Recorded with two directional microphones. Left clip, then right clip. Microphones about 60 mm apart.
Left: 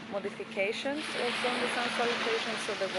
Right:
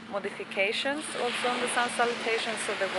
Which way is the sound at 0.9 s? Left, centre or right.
Left.